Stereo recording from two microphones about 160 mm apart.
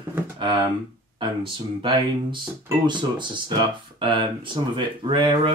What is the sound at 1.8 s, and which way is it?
Speech, 30° right (ahead or behind).